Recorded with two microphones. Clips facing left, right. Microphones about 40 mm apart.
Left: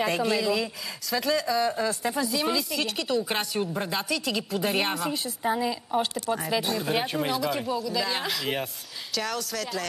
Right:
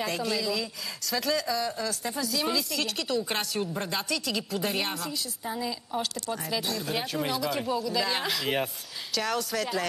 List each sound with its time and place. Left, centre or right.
0.0 s speech: centre
1.1 s a woman's voice: centre
4.7 s a woman's voice: centre
5.1 s a woman's voice: left
5.6 s speech: left
7.2 s a woman's voice: centre